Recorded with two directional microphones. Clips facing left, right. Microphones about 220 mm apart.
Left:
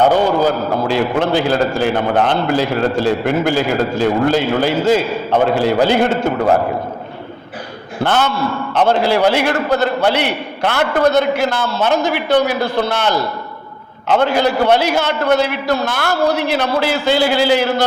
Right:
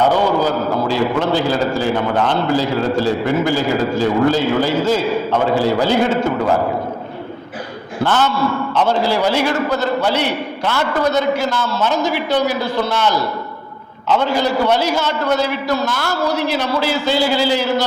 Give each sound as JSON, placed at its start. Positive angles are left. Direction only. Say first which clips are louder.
{"t": 0.4, "sound": "a man's voice", "louder": "left 1 dB", "side_deg": 60}
{"t": 8.0, "sound": "a man's voice", "louder": "even", "side_deg": 60}